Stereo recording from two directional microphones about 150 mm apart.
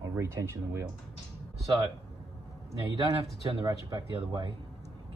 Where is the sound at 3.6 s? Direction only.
30° right (ahead or behind).